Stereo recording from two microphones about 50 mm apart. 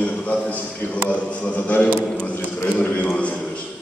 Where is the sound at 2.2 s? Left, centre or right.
Left.